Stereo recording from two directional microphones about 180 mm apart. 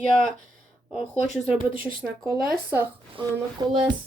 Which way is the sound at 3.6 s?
25° right (ahead or behind).